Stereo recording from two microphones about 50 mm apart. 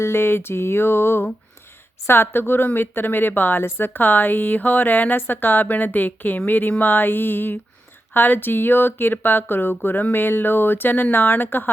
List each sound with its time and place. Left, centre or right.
0.0 s music: left
2.0 s speech: left